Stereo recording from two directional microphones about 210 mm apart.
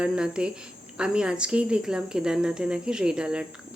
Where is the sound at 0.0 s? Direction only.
5° right (ahead or behind).